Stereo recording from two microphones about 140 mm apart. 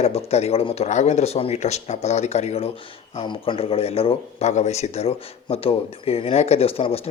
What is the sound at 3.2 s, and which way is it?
Speech, 35° left (ahead or behind).